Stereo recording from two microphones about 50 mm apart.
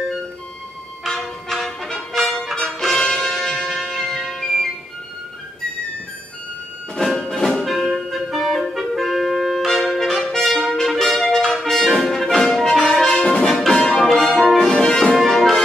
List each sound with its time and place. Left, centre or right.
1.0 s music: centre
7.0 s clarinet: centre
10.4 s trumpet: centre
11.5 s brass instrument: centre
12.8 s brass instrument: centre
13.5 s music: centre
14.4 s brass instrument: centre
14.7 s music: centre
15.1 s music: centre